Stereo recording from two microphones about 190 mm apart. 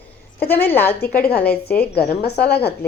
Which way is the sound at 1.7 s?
55° left (ahead or behind).